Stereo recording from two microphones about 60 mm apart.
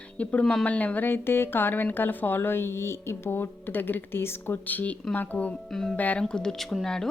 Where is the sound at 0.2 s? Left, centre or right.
Left.